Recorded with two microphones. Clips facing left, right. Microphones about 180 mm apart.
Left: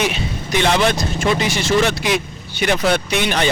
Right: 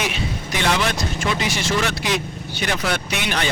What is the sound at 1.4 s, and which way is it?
Speech, 25° left (ahead or behind).